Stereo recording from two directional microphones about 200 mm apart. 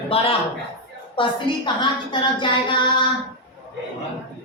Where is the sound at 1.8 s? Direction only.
25° left (ahead or behind).